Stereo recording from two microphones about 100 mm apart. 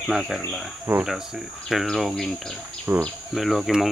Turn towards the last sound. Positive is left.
turn(degrees=0)  # may be behind; listen again after turning